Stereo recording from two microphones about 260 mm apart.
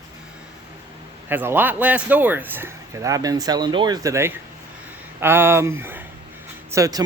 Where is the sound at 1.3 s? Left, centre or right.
Centre.